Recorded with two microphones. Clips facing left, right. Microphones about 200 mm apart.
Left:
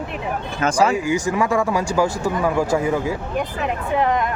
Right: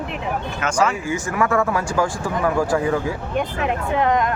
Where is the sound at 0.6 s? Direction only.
35° left (ahead or behind).